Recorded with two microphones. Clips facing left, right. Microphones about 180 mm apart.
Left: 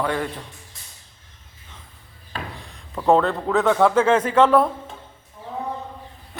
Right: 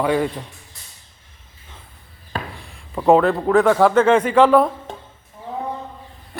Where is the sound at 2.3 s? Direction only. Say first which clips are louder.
Right 4 dB; 45° right (ahead or behind).